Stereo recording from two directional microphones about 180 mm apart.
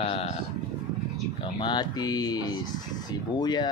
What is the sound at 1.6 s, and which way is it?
Speech, 25° left (ahead or behind).